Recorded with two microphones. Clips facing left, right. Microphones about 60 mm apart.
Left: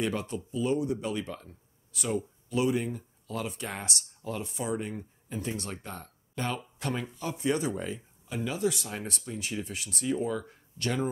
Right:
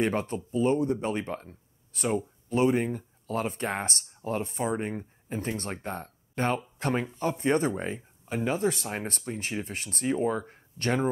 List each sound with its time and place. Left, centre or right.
0.0 s speech: right